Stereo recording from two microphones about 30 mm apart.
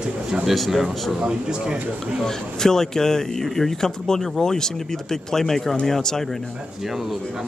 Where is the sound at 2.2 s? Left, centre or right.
Centre.